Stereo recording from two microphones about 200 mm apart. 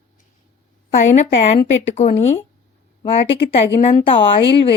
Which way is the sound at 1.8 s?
35° left (ahead or behind).